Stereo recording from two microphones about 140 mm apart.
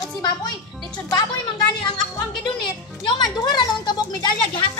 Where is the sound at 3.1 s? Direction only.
30° left (ahead or behind).